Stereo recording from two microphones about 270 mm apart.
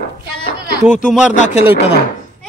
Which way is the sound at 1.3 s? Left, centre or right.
Left.